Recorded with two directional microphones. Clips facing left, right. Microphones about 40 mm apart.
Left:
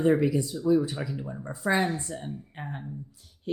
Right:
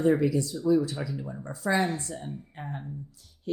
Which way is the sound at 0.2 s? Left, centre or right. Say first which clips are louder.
Even; left.